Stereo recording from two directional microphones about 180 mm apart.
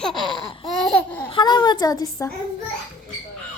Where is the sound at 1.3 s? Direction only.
25° left (ahead or behind).